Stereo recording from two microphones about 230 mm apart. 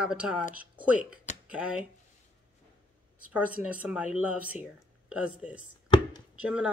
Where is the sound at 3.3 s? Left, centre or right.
Centre.